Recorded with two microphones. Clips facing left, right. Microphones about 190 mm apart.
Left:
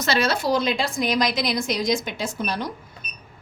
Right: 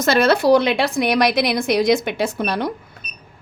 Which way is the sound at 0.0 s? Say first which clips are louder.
Right 7 dB; 55° right (ahead or behind).